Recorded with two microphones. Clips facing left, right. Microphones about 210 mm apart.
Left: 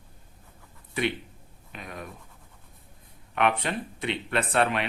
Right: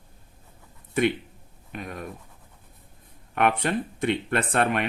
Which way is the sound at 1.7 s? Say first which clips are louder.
Right 4 dB; 50° right (ahead or behind).